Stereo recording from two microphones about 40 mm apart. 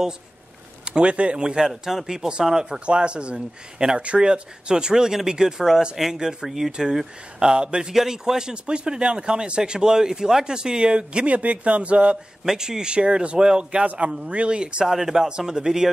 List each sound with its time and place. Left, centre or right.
0.8 s speech: right
1.4 s speech: centre
1.7 s speech: centre
2.0 s speech: centre
2.8 s speech: right
7.9 s speech: centre
11.3 s speech: right
12.4 s speech: centre
14.9 s speech: centre